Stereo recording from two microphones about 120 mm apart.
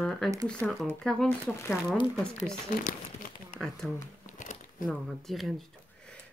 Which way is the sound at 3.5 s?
90° left.